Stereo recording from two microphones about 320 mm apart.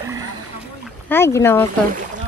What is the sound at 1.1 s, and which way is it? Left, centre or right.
Speech, centre.